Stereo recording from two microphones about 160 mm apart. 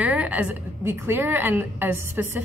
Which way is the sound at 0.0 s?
10° right (ahead or behind).